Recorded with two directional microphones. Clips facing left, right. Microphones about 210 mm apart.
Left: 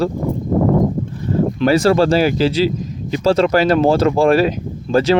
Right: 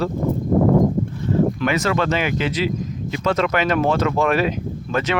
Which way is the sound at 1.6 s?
35° left (ahead or behind).